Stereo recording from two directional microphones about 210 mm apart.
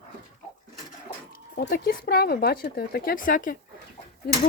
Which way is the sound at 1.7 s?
45° left (ahead or behind).